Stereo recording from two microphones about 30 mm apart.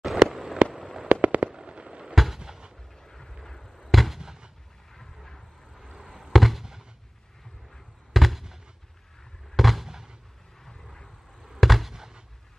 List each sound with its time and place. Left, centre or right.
0.0 s a sound: centre
1.2 s fireworks: right
1.5 s fireworks: right
2.3 s a sound: centre
3.0 s vehicle: centre
3.4 s fireworks: centre
4.2 s fireworks: right
5.9 s fireworks: centre
6.6 s fireworks: centre
8.1 s fireworks: centre
9.6 s fireworks: centre
9.8 s fireworks: centre
11.6 s fireworks: centre
11.9 s fireworks: centre